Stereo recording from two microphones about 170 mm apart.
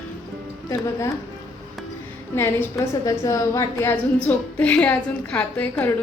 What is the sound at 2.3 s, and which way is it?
A woman's voice, 15° left (ahead or behind).